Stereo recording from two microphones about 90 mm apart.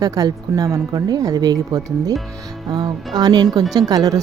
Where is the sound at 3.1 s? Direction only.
50° right (ahead or behind).